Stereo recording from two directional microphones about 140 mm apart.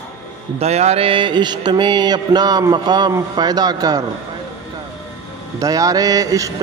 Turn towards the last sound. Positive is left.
turn(degrees=-25)  # may be behind; listen again after turning